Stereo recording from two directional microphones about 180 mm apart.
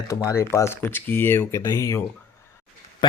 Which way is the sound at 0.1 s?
15° left (ahead or behind).